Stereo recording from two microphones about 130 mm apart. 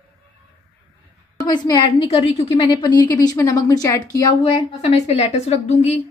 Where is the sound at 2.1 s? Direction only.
50° left (ahead or behind).